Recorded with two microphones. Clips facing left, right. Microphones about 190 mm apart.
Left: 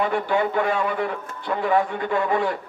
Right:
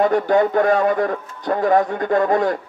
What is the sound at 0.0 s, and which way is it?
A man's voice, 40° right (ahead or behind).